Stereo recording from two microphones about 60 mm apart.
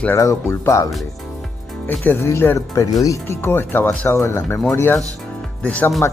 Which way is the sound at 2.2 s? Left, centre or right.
Left.